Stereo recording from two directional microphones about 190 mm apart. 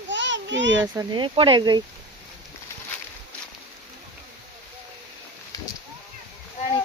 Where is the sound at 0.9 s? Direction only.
25° right (ahead or behind).